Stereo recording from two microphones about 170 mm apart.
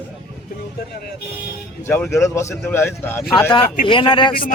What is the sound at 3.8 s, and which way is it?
Speech, 30° left (ahead or behind).